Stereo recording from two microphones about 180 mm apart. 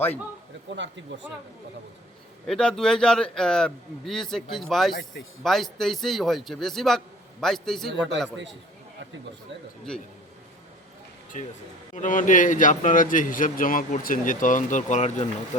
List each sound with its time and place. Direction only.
0.8 s speech: 90° right
2.5 s a man's voice: 5° left (ahead or behind)
11.3 s a man's voice: 45° left (ahead or behind)